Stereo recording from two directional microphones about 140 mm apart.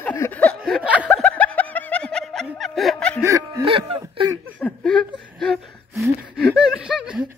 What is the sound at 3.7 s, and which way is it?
Speech, 40° right (ahead or behind).